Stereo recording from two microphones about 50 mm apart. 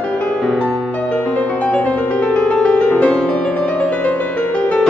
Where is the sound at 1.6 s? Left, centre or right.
Left.